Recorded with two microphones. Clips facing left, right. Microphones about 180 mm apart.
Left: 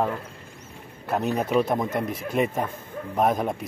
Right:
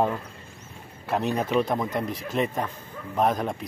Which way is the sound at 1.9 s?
50° left (ahead or behind).